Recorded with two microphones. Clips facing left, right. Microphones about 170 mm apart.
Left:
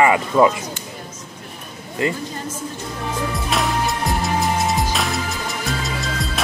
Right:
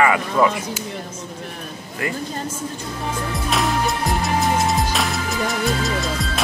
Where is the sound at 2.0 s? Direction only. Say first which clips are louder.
Left 5 dB; 25° left (ahead or behind).